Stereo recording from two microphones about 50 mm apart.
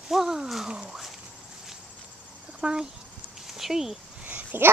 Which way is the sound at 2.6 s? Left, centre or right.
Centre.